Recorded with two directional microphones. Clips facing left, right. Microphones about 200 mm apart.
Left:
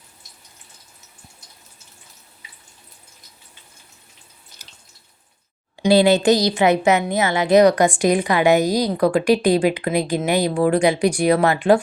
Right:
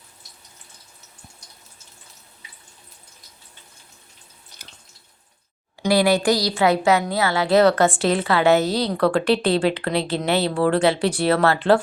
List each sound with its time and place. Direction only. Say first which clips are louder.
5.9 s a woman's voice: left 4 dB; 25° left (ahead or behind)